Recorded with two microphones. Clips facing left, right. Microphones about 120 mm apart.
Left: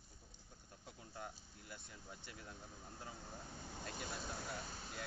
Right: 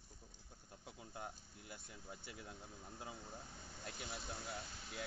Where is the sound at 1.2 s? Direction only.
5° right (ahead or behind).